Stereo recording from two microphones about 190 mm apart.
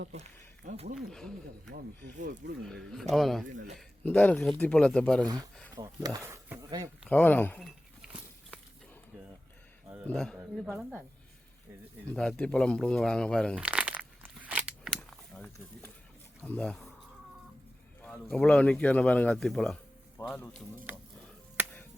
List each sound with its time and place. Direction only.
0.1 s speech: 40° right (ahead or behind)
0.9 s speech: centre (ahead or behind)
3.4 s a man's voice: 45° right (ahead or behind)
3.8 s speech: 10° left (ahead or behind)
5.7 s speech: 20° right (ahead or behind)
7.1 s speech: 10° left (ahead or behind)
9.1 s a sound: 5° right (ahead or behind)
9.9 s speech: centre (ahead or behind)
12.1 s speech: 5° left (ahead or behind)
13.6 s crumpling: 5° right (ahead or behind)
15.1 s a sound: 5° left (ahead or behind)
16.4 s speech: 10° left (ahead or behind)
18.0 s a man's voice: 5° left (ahead or behind)
20.9 s music: 10° right (ahead or behind)